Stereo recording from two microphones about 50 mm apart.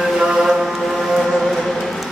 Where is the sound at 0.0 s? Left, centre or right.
Centre.